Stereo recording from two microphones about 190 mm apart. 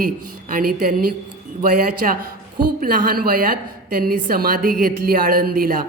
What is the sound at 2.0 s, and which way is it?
A woman's voice, 45° right (ahead or behind).